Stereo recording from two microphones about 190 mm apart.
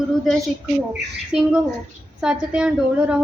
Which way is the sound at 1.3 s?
5° right (ahead or behind).